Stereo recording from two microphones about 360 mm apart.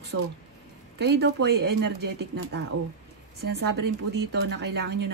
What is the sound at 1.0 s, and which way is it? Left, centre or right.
Speech, right.